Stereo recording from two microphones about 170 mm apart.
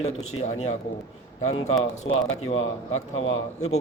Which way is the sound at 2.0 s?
40° left (ahead or behind).